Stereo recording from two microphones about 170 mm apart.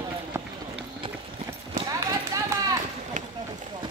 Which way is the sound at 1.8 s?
20° right (ahead or behind).